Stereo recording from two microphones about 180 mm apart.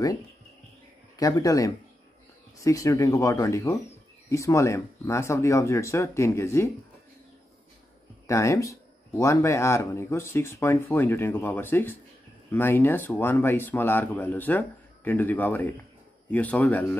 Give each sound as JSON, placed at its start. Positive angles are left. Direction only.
{"t": 1.1, "sound": "speech", "side_deg": 20}
{"t": 8.3, "sound": "speech", "side_deg": 15}